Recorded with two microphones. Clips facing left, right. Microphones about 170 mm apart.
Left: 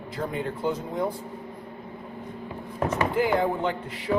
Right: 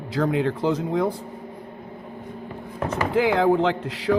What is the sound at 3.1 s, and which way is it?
A man's voice, 90° right.